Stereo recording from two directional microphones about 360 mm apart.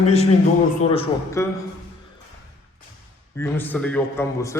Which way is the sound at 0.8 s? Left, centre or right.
Centre.